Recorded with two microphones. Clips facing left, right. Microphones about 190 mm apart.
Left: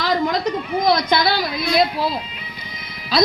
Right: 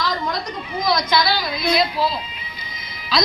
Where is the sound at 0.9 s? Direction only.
55° left (ahead or behind).